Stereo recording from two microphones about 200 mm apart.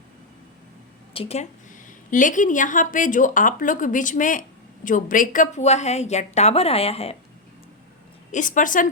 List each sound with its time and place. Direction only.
1.1 s a woman's voice: 30° left (ahead or behind)
8.3 s a woman's voice: 40° left (ahead or behind)